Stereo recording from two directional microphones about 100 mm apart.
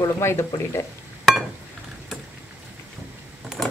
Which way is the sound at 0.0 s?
25° left (ahead or behind).